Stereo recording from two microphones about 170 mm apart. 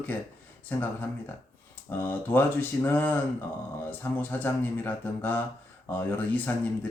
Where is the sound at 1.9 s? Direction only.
10° left (ahead or behind).